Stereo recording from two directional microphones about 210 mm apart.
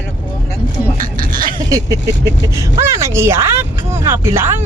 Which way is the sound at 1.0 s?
40° right (ahead or behind).